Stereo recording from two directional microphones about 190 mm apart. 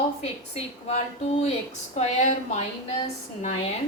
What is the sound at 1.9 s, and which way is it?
Speech, 35° left (ahead or behind).